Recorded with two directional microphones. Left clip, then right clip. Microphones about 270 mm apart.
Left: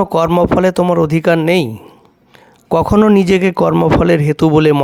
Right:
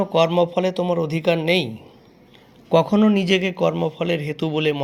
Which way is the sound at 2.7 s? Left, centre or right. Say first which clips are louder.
Left 6 dB; left.